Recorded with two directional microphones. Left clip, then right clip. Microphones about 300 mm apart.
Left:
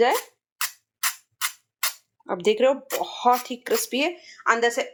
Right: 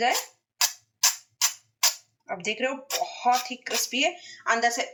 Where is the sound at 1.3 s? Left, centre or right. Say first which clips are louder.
Right 2 dB; centre.